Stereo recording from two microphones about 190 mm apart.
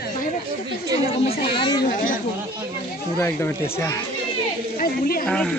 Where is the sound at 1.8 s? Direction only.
45° left (ahead or behind).